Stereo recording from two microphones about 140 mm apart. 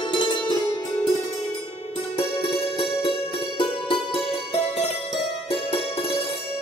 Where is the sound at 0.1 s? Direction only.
35° left (ahead or behind).